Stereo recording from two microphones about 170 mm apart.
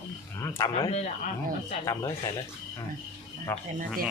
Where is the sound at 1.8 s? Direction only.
20° left (ahead or behind).